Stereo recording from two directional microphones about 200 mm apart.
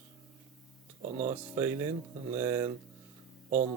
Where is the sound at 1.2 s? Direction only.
10° right (ahead or behind).